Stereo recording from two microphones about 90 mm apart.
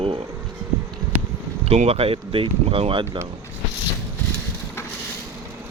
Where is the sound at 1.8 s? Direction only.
90° right.